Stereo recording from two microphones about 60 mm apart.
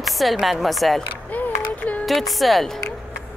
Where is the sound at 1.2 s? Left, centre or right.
Left.